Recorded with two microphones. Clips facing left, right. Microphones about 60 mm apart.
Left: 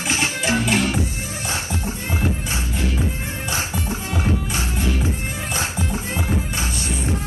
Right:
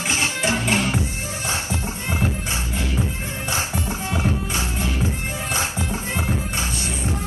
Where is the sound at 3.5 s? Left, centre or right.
Right.